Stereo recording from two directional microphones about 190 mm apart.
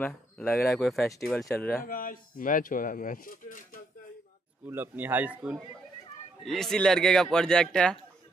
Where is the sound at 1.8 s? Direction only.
50° left (ahead or behind).